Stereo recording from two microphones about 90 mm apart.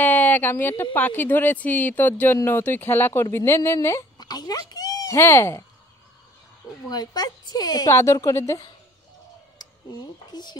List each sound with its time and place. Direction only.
0.0 s a sound: 20° left (ahead or behind)
0.9 s speech: 20° left (ahead or behind)
4.2 s speech: 50° left (ahead or behind); by 5.7 s 30° left (ahead or behind)
6.9 s a woman's voice: 50° left (ahead or behind)
7.9 s a woman's voice: 35° left (ahead or behind)
9.6 s speech: 50° left (ahead or behind)